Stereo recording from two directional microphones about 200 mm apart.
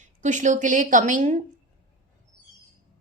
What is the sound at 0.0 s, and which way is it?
Speech, 35° right (ahead or behind).